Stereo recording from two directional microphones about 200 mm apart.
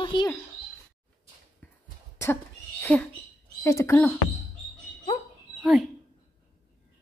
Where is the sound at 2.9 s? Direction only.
10° left (ahead or behind).